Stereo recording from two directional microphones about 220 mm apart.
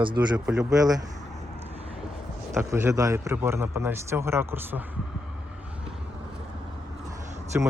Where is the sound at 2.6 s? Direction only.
10° right (ahead or behind).